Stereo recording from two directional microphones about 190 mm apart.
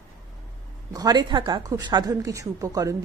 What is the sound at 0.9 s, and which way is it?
Speech, 20° right (ahead or behind).